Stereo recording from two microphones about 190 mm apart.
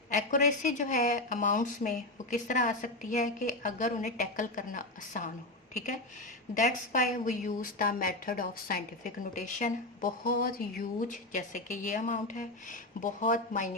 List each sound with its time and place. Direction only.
0.1 s a woman's voice: 40° left (ahead or behind)
6.5 s a woman's voice: 40° left (ahead or behind)